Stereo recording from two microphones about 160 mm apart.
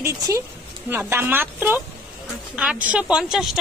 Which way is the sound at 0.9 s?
15° right (ahead or behind).